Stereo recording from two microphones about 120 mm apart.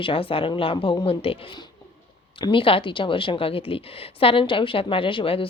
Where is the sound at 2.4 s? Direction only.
45° left (ahead or behind).